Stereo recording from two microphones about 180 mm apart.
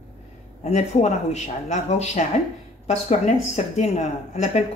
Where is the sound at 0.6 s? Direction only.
35° left (ahead or behind).